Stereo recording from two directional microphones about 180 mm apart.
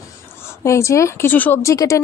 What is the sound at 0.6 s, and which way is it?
A woman's voice, 15° left (ahead or behind).